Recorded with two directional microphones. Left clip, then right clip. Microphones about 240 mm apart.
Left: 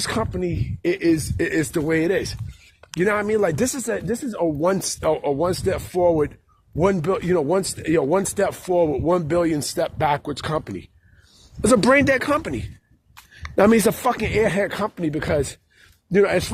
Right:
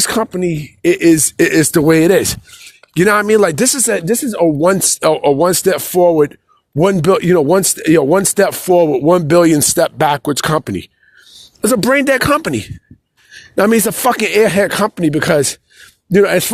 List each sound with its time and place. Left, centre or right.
0.0 s speech: right